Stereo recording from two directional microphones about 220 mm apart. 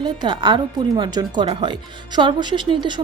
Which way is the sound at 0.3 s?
20° right (ahead or behind).